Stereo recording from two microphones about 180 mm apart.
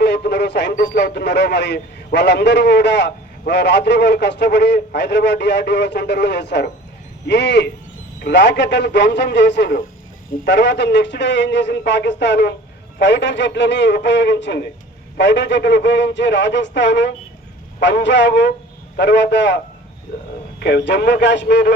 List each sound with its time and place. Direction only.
0.0 s radio: 70° left (ahead or behind)
0.8 s a man's voice: 75° left (ahead or behind)